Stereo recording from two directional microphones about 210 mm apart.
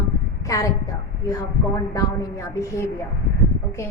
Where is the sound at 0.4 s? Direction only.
15° left (ahead or behind).